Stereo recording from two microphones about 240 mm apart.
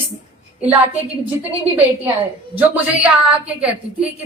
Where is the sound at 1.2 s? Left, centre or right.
Centre.